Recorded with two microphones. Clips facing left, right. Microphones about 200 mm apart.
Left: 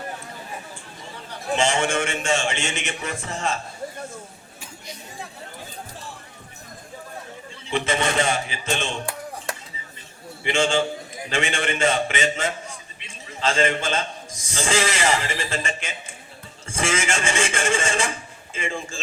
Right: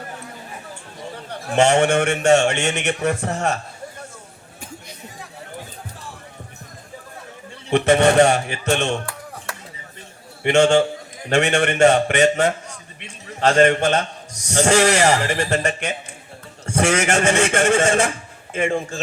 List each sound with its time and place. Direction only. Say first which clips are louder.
1.3 s a man's voice: right 6 dB; 65° right (ahead or behind)
7.7 s a man's voice: right 9 dB; 65° right (ahead or behind)
10.4 s a man's voice: right 7 dB; 65° right (ahead or behind)